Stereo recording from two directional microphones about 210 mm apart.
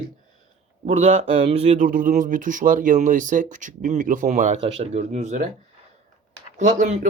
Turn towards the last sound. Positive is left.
turn(degrees=-35)  # may be behind; listen again after turning